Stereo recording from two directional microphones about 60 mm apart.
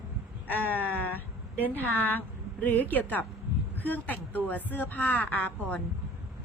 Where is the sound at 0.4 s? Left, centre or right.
Left.